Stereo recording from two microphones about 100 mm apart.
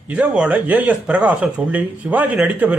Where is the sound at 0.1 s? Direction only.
10° right (ahead or behind).